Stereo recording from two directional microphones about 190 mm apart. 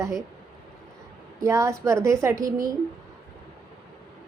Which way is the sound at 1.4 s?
15° right (ahead or behind).